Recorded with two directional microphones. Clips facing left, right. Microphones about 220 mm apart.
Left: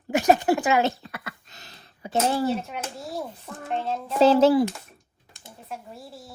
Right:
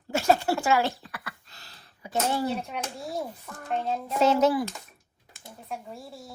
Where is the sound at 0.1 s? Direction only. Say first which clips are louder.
Left 4 dB; 15° left (ahead or behind).